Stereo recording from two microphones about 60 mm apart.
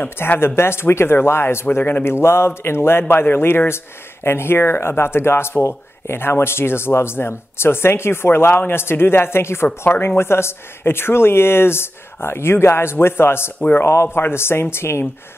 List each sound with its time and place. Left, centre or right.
0.0 s speech: left
13.6 s a man's voice: left
13.8 s speech: left